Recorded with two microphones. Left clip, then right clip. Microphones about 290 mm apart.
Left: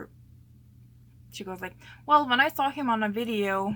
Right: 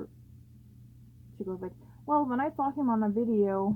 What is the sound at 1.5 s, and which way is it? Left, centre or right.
Speech, left.